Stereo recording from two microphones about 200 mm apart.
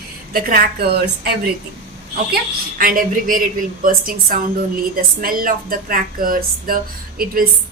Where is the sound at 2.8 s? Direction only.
45° right (ahead or behind).